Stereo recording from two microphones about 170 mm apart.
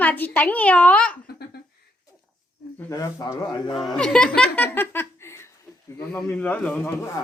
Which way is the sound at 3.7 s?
Centre (ahead or behind).